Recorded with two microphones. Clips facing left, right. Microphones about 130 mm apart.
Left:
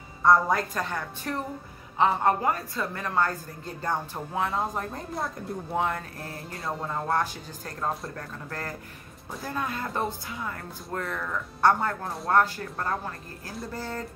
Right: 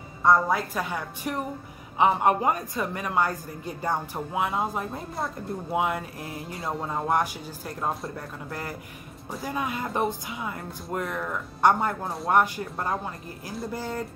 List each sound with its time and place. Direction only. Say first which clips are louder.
0.2 s a woman's voice: even; centre (ahead or behind)
6.6 s speech: right 1 dB; centre (ahead or behind)
7.1 s a woman's voice: right 3 dB; 15° right (ahead or behind)